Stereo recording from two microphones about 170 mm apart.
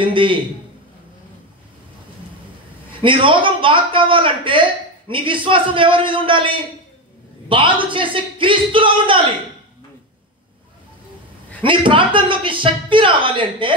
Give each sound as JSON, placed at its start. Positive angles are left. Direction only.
{"t": 0.0, "sound": "a woman's voice", "side_deg": -30}
{"t": 2.9, "sound": "a woman's voice", "side_deg": -30}
{"t": 11.6, "sound": "a woman's voice", "side_deg": -30}